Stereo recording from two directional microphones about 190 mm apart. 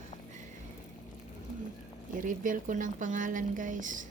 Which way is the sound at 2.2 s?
45° right (ahead or behind).